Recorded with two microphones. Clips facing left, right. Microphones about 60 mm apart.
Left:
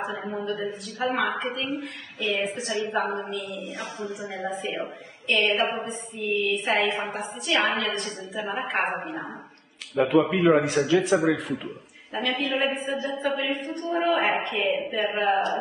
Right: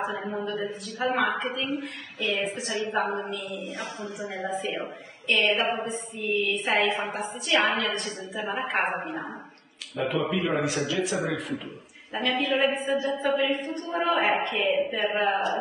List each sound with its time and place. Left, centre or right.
0.0 s a woman's voice: centre
9.9 s a man's voice: left
12.1 s a woman's voice: centre